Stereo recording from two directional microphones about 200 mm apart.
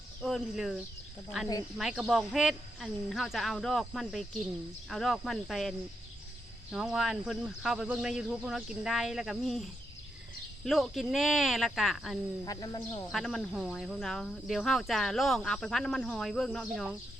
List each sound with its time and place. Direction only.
0.2 s speech: centre (ahead or behind)
1.8 s speech: 5° right (ahead or behind)
12.5 s speech: 20° left (ahead or behind)
13.1 s speech: centre (ahead or behind)